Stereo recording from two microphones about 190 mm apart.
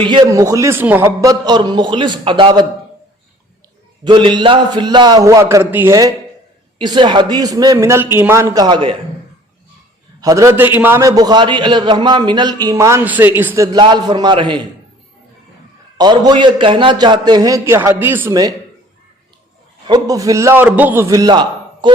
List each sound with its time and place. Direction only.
0.0 s a man's voice: 25° right (ahead or behind)
4.0 s a man's voice: 25° right (ahead or behind)
10.2 s a man's voice: 15° right (ahead or behind)
13.7 s a man's voice: 25° right (ahead or behind)
16.0 s a man's voice: 20° right (ahead or behind)
19.9 s a man's voice: 20° right (ahead or behind)